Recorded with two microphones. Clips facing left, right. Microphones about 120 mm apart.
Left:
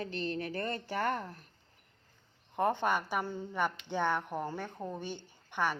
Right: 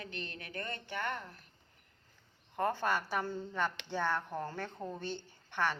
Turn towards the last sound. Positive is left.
turn(degrees=15)  # may be behind; listen again after turning